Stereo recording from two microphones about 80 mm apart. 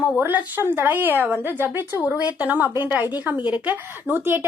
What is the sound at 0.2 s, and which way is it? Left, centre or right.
A woman's voice, right.